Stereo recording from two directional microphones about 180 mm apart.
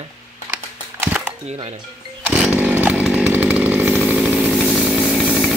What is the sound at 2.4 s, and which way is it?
Chainsaw, 10° right (ahead or behind).